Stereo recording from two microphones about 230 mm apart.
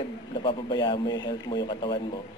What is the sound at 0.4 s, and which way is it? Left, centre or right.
A man's voice, left.